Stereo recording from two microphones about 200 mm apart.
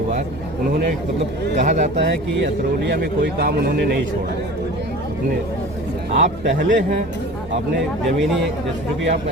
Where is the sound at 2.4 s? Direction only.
55° right (ahead or behind).